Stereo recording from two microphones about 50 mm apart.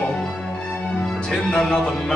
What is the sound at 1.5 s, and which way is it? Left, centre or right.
Speech, left.